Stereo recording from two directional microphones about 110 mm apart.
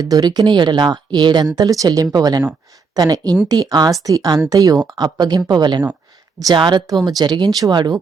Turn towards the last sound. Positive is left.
turn(degrees=-40)  # may be behind; listen again after turning